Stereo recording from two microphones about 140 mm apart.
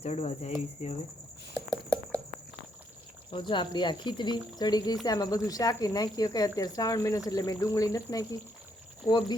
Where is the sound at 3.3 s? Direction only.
35° left (ahead or behind).